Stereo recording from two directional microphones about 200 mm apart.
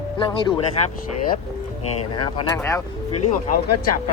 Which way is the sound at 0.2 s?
25° left (ahead or behind).